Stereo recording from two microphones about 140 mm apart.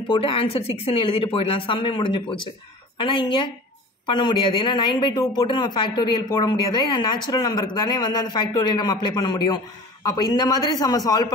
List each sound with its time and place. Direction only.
0.1 s a man's voice: 40° left (ahead or behind)